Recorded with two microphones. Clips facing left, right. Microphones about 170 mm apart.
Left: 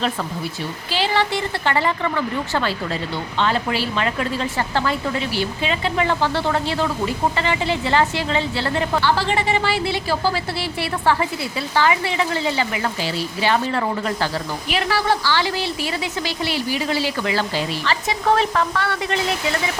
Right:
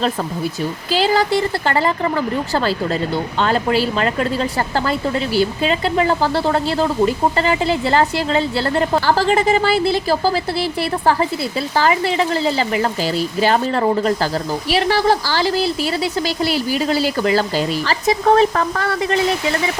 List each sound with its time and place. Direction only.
0.9 s speech: 40° right (ahead or behind)